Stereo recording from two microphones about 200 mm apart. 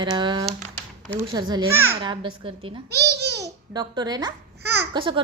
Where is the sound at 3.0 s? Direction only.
55° right (ahead or behind).